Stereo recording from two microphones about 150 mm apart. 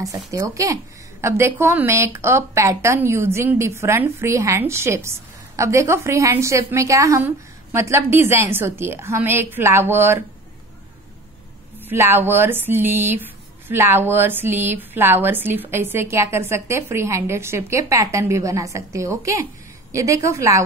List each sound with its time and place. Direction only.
0.0 s a woman's voice: 25° right (ahead or behind)
11.8 s a woman's voice: 15° right (ahead or behind)